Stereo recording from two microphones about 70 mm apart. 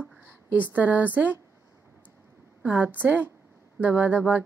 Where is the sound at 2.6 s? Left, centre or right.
Right.